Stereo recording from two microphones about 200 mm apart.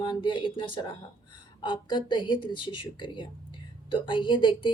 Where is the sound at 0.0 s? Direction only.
25° left (ahead or behind).